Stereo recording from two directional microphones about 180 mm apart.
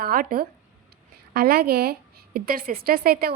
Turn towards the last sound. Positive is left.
turn(degrees=-55)  # may be behind; listen again after turning